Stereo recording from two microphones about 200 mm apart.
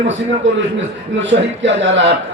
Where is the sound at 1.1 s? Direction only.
65° right (ahead or behind).